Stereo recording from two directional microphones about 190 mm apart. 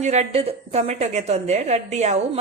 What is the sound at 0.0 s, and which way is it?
A woman's voice, 35° right (ahead or behind).